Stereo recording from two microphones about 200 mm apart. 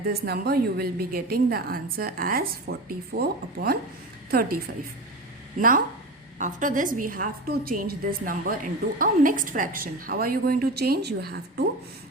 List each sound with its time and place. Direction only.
0.1 s a woman's voice: 50° right (ahead or behind)